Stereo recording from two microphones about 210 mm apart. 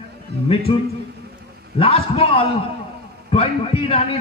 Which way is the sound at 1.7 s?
25° left (ahead or behind).